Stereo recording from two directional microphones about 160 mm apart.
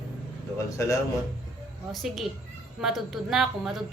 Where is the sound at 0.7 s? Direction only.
20° left (ahead or behind).